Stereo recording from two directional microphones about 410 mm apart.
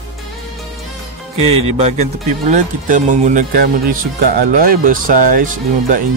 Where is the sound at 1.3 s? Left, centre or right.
Centre.